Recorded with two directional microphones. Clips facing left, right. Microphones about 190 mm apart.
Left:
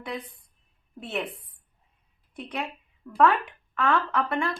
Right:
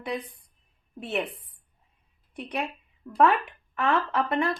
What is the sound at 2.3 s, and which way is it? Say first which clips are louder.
A woman's voice: right 2 dB; 15° right (ahead or behind).